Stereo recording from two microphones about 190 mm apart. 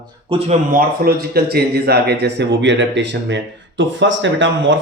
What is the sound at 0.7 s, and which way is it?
Speech, 55° right (ahead or behind).